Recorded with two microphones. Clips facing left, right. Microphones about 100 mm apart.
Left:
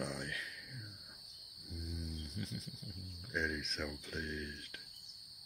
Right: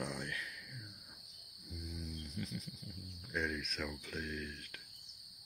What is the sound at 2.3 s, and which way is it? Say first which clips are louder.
Cricket: right 1 dB; 30° left (ahead or behind).